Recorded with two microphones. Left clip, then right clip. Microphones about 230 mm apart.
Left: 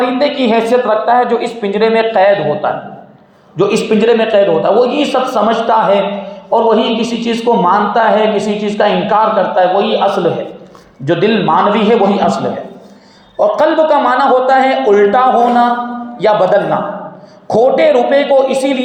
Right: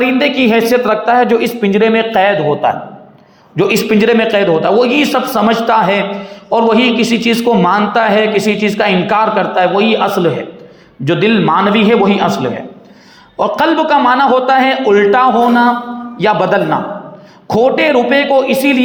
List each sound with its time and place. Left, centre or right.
0.2 s a man's voice: right
0.9 s a man's voice: right